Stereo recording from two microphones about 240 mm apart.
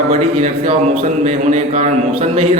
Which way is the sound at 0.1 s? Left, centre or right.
Right.